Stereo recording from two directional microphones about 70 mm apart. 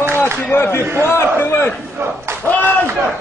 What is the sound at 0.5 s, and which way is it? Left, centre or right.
A man's voice, left.